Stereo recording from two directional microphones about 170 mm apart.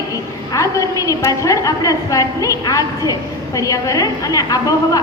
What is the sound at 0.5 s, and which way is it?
A woman's voice, 20° left (ahead or behind).